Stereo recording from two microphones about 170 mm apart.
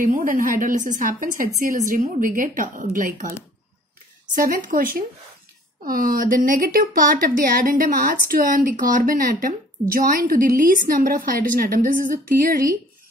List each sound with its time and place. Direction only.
0.0 s speech: 55° right (ahead or behind)
4.4 s a woman's voice: 55° right (ahead or behind)